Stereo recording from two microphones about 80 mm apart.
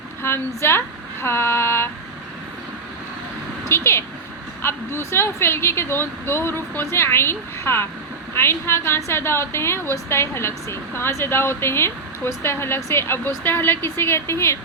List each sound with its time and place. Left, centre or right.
0.2 s a woman's voice: left
3.6 s a woman's voice: left